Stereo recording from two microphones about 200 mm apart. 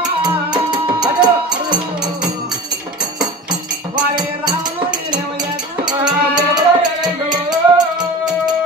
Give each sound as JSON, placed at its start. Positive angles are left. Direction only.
{"t": 0.2, "sound": "music", "side_deg": -20}
{"t": 3.9, "sound": "music", "side_deg": -20}
{"t": 5.9, "sound": "music", "side_deg": -20}